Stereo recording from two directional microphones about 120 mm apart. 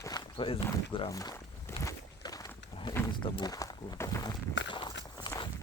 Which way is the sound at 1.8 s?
30° left (ahead or behind).